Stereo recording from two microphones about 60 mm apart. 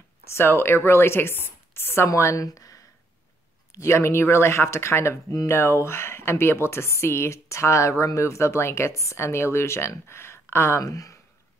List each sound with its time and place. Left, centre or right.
0.3 s speech: left
2.0 s a woman's voice: left
2.4 s speech: left
3.7 s speech: left
10.8 s speech: left